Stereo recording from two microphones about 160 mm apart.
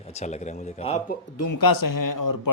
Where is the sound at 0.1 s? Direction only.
45° left (ahead or behind).